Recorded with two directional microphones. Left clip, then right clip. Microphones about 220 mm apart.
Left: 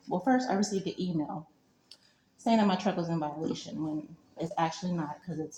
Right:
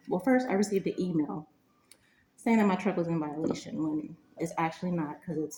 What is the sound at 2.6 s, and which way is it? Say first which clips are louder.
Speech: right 1 dB; 40° left (ahead or behind).